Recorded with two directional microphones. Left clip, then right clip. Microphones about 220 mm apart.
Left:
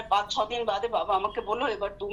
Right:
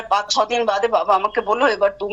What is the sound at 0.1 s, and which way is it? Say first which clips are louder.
Speech: right 8 dB; 50° right (ahead or behind).